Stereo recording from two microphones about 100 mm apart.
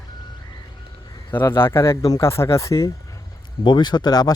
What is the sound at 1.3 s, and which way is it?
Speech, 25° left (ahead or behind).